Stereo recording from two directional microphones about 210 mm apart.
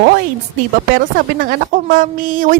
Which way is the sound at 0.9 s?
40° right (ahead or behind).